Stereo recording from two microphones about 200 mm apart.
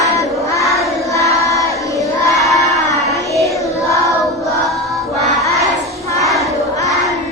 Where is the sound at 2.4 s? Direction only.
Centre (ahead or behind).